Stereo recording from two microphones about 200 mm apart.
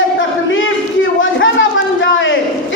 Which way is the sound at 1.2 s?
70° left (ahead or behind).